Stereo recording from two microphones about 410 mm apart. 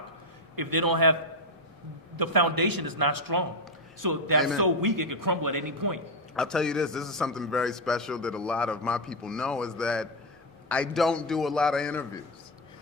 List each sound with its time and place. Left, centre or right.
0.5 s a man's voice: right
2.1 s a man's voice: right
6.3 s a man's voice: centre